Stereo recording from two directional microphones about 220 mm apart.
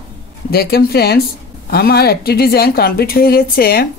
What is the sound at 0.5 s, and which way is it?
Speech, 45° left (ahead or behind).